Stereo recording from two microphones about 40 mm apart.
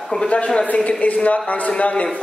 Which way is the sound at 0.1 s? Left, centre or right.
Left.